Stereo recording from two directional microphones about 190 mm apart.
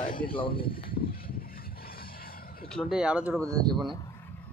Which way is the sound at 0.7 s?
50° left (ahead or behind).